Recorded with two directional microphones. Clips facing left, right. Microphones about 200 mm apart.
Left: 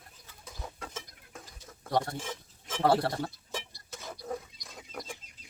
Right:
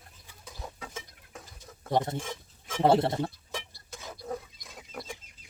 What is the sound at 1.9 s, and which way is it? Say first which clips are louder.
A man's voice: right 2 dB; 20° right (ahead or behind).